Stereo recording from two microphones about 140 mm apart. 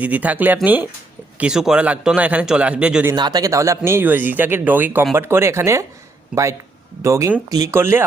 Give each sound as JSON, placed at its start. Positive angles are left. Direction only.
{"t": 0.0, "sound": "speech", "side_deg": -10}
{"t": 3.2, "sound": "speech", "side_deg": -30}